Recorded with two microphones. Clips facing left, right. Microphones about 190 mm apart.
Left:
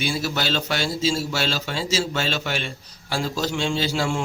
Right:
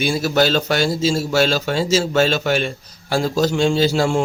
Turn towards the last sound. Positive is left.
turn(degrees=-45)  # may be behind; listen again after turning